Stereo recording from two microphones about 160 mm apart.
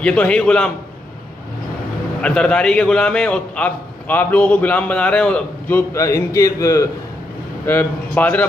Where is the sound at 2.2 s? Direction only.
5° left (ahead or behind).